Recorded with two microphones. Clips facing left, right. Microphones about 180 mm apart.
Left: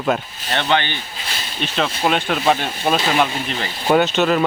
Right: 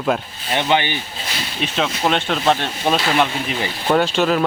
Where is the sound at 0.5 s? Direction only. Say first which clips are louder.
Right 1 dB; 15° right (ahead or behind).